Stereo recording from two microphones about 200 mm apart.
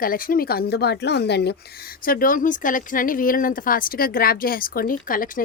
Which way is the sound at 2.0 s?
45° left (ahead or behind).